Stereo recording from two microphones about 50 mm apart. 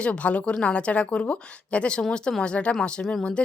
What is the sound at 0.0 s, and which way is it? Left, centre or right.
A woman's voice, left.